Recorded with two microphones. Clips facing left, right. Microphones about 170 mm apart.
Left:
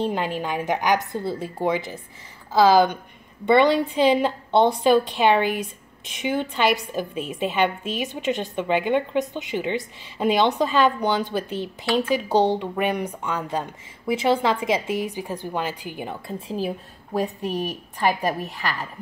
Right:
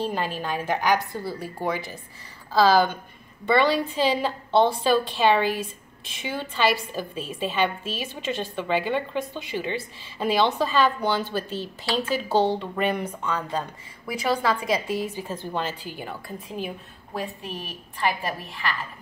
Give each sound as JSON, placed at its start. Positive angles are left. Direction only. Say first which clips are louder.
{"t": 0.0, "sound": "a woman's voice", "louder": "left 3 dB", "side_deg": 20}